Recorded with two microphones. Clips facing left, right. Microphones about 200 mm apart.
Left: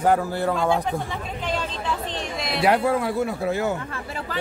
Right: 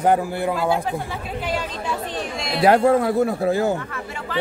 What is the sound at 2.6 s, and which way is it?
A man's voice, 40° right (ahead or behind).